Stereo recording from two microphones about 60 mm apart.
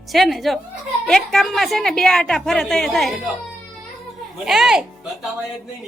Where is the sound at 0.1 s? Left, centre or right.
Centre.